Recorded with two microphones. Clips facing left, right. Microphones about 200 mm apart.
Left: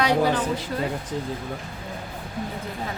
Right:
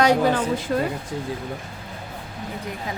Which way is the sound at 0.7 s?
55° right (ahead or behind).